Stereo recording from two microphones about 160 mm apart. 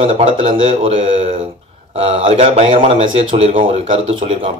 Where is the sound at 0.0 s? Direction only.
35° right (ahead or behind).